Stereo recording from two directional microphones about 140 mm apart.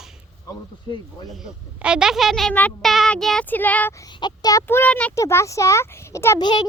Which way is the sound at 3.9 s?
30° left (ahead or behind).